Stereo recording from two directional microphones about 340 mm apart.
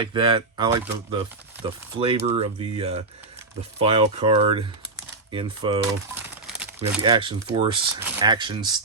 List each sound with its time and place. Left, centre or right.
0.0 s speech: centre
6.2 s a sound: centre
6.9 s speech: centre